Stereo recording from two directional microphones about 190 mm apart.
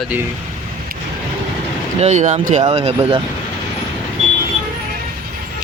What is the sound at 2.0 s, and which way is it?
Speech, 40° right (ahead or behind).